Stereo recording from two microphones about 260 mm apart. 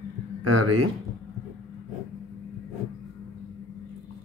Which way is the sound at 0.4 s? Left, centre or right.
Right.